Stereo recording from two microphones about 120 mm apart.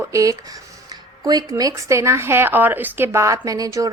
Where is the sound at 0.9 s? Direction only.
35° right (ahead or behind).